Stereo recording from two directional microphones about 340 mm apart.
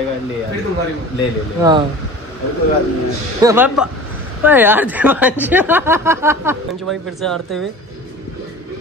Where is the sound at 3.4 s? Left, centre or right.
Centre.